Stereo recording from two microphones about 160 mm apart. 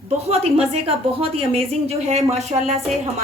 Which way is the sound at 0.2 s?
40° right (ahead or behind).